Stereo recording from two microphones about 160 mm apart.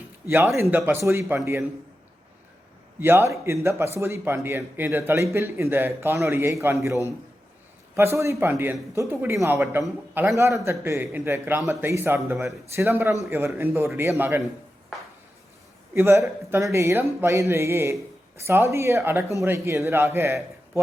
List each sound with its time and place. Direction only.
0.3 s a man's voice: 15° right (ahead or behind)
3.0 s a man's voice: 15° right (ahead or behind)
7.9 s a man's voice: 15° right (ahead or behind)
16.0 s a man's voice: 15° right (ahead or behind)